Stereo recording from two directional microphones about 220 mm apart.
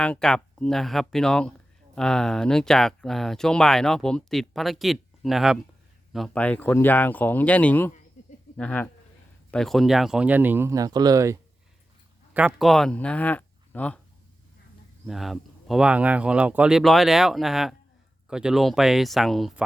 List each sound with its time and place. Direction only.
0.0 s speech: 5° left (ahead or behind)
8.2 s a sound: 35° left (ahead or behind)
8.5 s speech: 5° left (ahead or behind)
15.0 s speech: centre (ahead or behind)